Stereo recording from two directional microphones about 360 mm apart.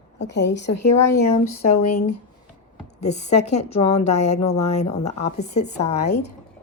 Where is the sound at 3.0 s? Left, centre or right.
Centre.